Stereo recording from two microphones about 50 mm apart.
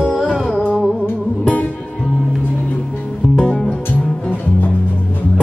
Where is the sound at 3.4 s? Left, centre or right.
Centre.